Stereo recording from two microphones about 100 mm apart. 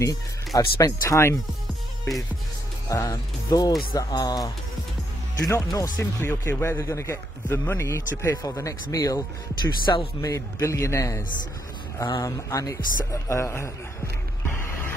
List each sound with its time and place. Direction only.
0.6 s speech: 30° left (ahead or behind)
2.9 s speech: 35° left (ahead or behind)
5.5 s speech: 30° left (ahead or behind)
14.5 s a sound: 20° left (ahead or behind)